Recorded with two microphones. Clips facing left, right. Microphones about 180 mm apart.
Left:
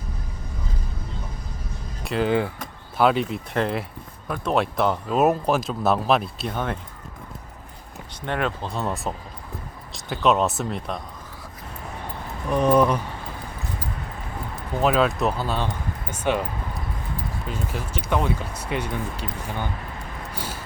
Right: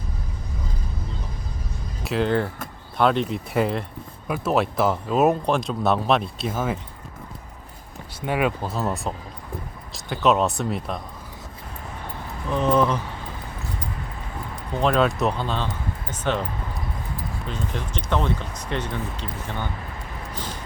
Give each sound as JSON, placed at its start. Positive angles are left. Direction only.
{"t": 2.0, "sound": "speech", "side_deg": 0}
{"t": 8.2, "sound": "speech", "side_deg": -10}
{"t": 12.5, "sound": "speech", "side_deg": 15}
{"t": 14.5, "sound": "speech", "side_deg": 0}
{"t": 20.3, "sound": "a sound", "side_deg": 10}